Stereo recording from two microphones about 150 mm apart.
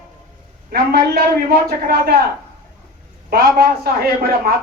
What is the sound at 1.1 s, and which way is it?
A man's voice, 90° right.